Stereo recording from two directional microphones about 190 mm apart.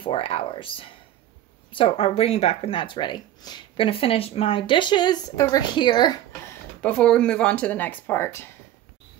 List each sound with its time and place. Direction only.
0.0 s speech: 30° left (ahead or behind)
6.8 s speech: 5° left (ahead or behind)